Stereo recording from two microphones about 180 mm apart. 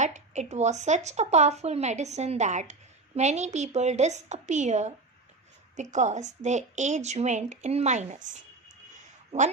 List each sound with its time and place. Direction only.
0.0 s speech: 40° right (ahead or behind)